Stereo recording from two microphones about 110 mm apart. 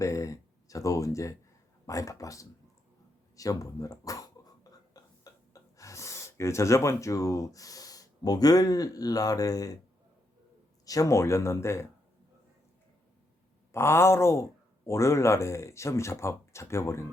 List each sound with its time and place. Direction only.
0.0 s speech: 30° left (ahead or behind)
3.3 s a sound: 30° left (ahead or behind)
10.8 s speech: 30° left (ahead or behind)
13.7 s speech: 25° left (ahead or behind)